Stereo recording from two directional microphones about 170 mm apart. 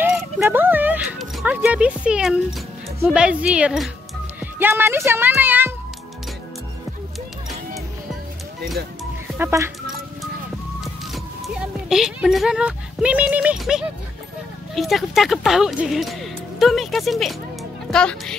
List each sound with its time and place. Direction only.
0.0 s a child's voice: 10° right (ahead or behind)
9.4 s speech: 15° right (ahead or behind)
11.4 s speech: centre (ahead or behind)